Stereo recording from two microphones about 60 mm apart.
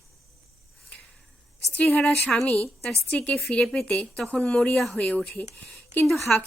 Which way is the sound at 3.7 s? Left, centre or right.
Centre.